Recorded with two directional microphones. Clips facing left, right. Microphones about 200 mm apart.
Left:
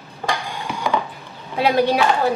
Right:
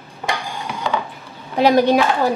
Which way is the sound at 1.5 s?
45° right (ahead or behind).